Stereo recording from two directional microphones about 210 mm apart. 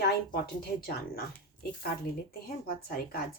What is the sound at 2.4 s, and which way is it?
Speech, 45° left (ahead or behind).